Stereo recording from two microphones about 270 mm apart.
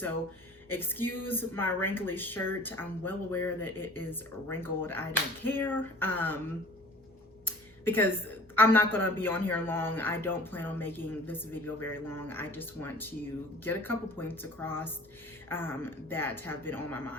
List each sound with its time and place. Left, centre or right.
0.7 s speech: centre
7.4 s a sound: centre
8.5 s speech: centre